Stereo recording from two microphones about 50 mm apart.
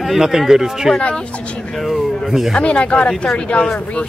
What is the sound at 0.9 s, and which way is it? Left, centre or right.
Speech, centre.